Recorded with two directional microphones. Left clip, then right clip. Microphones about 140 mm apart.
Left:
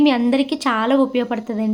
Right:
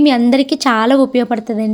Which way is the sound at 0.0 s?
35° right (ahead or behind).